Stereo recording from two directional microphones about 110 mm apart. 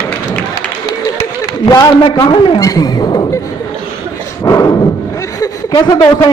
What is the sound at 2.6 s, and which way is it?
Speech, 35° left (ahead or behind).